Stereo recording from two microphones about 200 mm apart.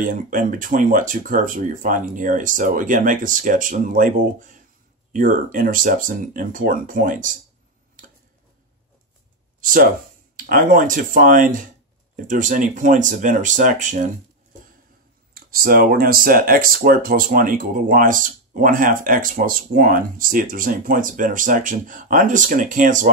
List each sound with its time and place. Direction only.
0.0 s speech: 45° right (ahead or behind)
9.6 s a sound: 45° right (ahead or behind)
10.3 s speech: 45° right (ahead or behind)
15.3 s speech: 50° right (ahead or behind)